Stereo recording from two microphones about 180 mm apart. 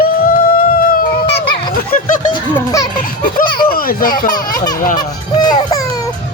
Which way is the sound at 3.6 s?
55° left (ahead or behind).